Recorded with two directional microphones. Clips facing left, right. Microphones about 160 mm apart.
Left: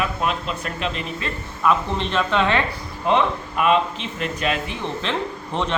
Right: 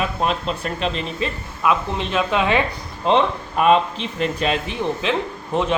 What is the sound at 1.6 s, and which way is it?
Speech, 5° right (ahead or behind).